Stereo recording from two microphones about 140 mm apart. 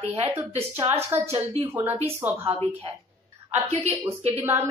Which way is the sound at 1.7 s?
15° right (ahead or behind).